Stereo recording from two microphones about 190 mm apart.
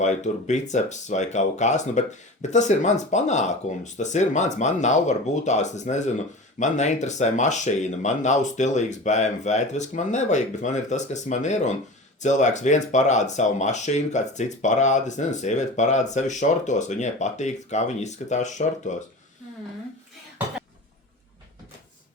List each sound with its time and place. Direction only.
0.0 s speech: 40° left (ahead or behind)